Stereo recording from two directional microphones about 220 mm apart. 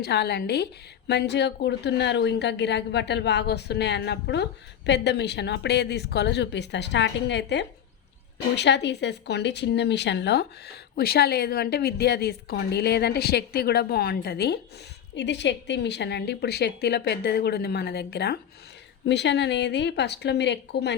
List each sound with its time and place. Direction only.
0.0 s a woman's voice: 50° left (ahead or behind)